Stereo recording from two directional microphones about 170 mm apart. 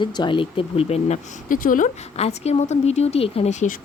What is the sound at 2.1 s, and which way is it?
Speech, 40° left (ahead or behind).